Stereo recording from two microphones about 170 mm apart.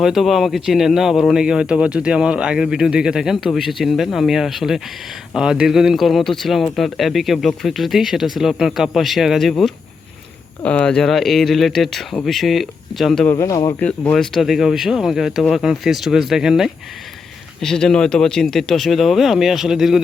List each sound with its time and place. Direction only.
0.0 s speech: centre (ahead or behind)
13.3 s speech: 20° left (ahead or behind)
13.7 s speech: 10° left (ahead or behind)